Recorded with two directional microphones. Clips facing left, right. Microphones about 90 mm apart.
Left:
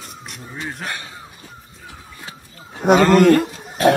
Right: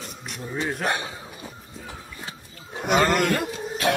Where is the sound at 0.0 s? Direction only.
Centre (ahead or behind).